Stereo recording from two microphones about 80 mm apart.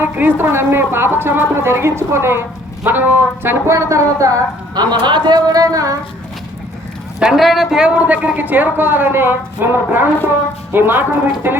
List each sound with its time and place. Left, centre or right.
0.0 s a woman's voice: right
4.7 s a man's voice: right
7.2 s speech: centre
7.9 s a woman's voice: centre